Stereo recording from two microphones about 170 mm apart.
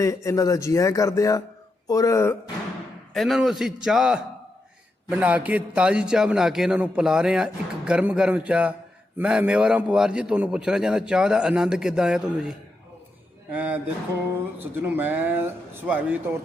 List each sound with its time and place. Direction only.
0.0 s speech: 20° left (ahead or behind)
3.1 s a man's voice: centre (ahead or behind)